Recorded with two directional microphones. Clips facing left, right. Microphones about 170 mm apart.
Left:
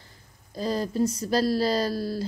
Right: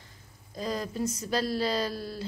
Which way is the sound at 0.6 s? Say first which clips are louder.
Left 6 dB; 35° left (ahead or behind).